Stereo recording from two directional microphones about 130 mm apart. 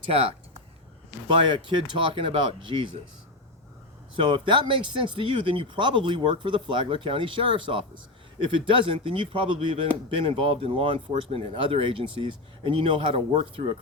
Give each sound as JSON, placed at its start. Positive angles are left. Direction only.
{"t": 0.1, "sound": "speech", "side_deg": -50}
{"t": 4.2, "sound": "speech", "side_deg": -40}